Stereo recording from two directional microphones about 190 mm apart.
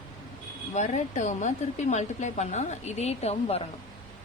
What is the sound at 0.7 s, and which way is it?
Speech, 35° left (ahead or behind).